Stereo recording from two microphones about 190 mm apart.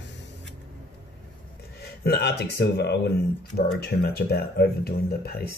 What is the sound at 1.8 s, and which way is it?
Speech, 55° left (ahead or behind).